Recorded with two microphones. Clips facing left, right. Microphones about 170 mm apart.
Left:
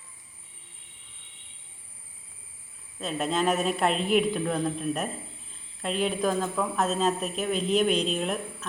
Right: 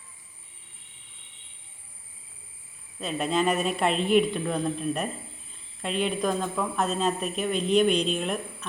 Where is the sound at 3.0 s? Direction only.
Centre (ahead or behind).